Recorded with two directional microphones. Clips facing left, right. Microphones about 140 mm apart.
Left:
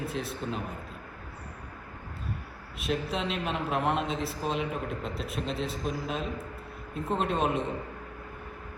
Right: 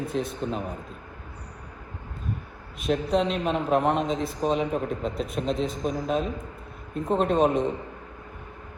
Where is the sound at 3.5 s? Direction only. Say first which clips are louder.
Right 8 dB; 40° right (ahead or behind).